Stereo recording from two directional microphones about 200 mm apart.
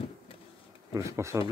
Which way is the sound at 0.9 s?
15° right (ahead or behind).